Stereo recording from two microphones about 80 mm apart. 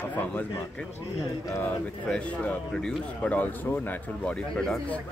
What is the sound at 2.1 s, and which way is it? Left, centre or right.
Speech, centre.